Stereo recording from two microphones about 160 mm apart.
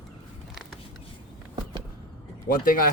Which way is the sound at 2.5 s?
60° left (ahead or behind).